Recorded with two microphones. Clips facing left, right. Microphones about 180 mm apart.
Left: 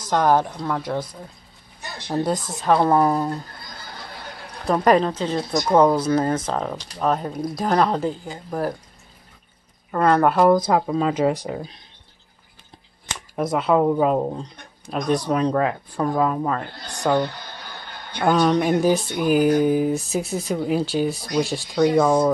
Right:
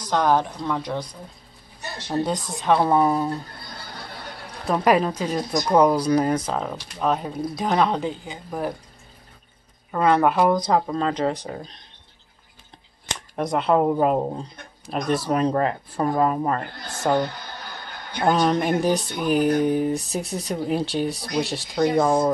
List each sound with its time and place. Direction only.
0.1 s speech: 10° left (ahead or behind)
2.0 s speech: 5° left (ahead or behind)
4.8 s speech: 10° right (ahead or behind)
5.4 s speech: 5° left (ahead or behind)
5.8 s speech: 10° right (ahead or behind)
9.8 s speech: centre (ahead or behind)
13.1 s speech: centre (ahead or behind)